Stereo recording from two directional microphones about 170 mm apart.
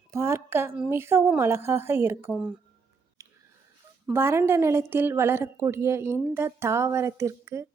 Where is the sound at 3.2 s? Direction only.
20° right (ahead or behind).